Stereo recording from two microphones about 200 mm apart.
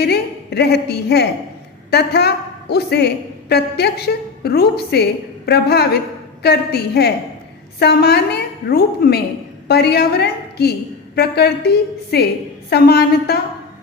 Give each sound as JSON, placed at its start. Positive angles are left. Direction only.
{"t": 0.0, "sound": "a woman's voice", "side_deg": 55}